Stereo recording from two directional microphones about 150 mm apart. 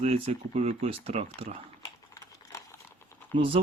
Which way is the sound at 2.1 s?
25° left (ahead or behind).